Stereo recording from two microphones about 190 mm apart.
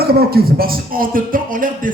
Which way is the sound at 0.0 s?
55° right (ahead or behind).